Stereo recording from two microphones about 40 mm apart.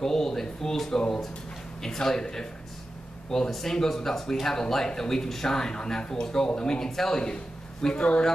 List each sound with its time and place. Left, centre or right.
0.0 s a man's voice: centre